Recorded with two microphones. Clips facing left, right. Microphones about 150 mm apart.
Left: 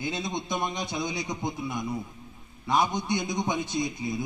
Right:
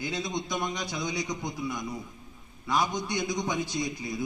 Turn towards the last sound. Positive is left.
turn(degrees=25)  # may be behind; listen again after turning